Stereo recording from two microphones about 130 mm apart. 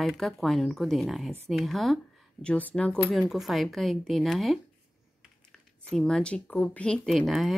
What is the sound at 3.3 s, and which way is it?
Speech, centre (ahead or behind).